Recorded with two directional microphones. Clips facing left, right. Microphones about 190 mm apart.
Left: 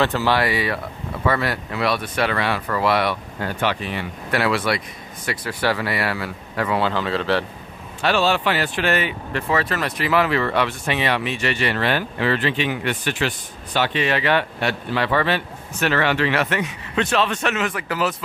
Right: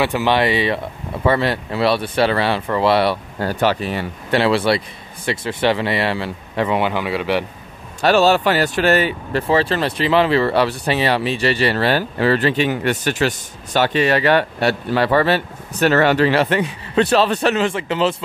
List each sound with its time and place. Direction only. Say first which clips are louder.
0.0 s speech: right 3 dB; 15° right (ahead or behind); by 4.1 s 40° right (ahead or behind)
4.3 s speech: right 5 dB; 30° right (ahead or behind)
8.0 s speech: right 6 dB; 40° right (ahead or behind); by 18.1 s 25° right (ahead or behind)